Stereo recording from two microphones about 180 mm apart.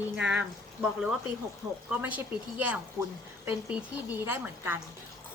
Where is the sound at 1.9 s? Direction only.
10° right (ahead or behind).